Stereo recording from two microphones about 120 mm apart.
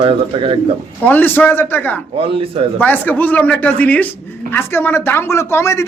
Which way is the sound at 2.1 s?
50° right (ahead or behind).